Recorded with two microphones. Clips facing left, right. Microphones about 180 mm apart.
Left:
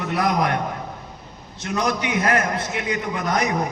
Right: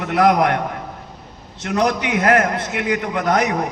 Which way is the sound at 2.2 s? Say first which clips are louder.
Right 7 dB; 60° right (ahead or behind).